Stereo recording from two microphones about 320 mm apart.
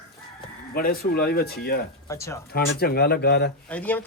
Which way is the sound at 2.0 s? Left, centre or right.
Centre.